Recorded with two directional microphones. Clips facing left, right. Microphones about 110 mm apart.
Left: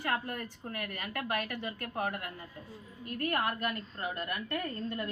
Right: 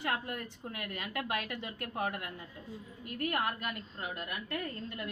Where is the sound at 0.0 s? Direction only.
20° right (ahead or behind).